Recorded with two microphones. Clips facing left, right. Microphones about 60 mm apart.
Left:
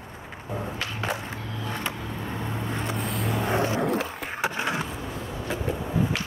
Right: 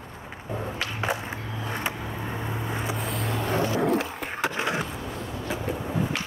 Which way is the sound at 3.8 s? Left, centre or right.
Centre.